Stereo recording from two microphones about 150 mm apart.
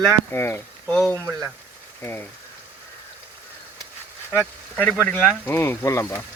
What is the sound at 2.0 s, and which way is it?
Speech, 15° left (ahead or behind).